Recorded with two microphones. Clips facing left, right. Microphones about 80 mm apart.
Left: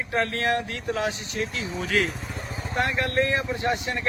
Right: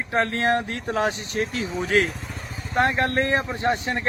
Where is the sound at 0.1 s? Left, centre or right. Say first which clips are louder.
Right 3 dB; right.